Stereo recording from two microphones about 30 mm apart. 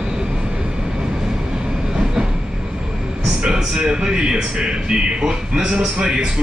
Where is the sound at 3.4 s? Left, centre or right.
Right.